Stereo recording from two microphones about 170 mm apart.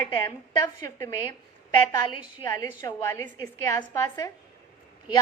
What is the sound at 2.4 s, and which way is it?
A woman's voice, 20° left (ahead or behind).